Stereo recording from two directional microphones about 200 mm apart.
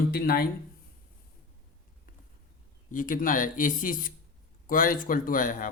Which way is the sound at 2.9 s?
40° left (ahead or behind).